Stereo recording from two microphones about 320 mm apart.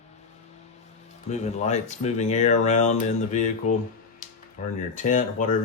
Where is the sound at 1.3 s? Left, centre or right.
Left.